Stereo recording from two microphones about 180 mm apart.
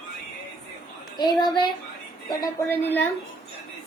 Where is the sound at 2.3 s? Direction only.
15° left (ahead or behind).